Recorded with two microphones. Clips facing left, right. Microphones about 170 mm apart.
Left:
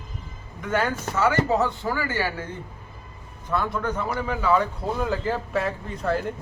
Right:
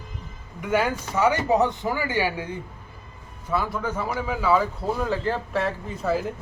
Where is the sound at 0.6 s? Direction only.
10° right (ahead or behind).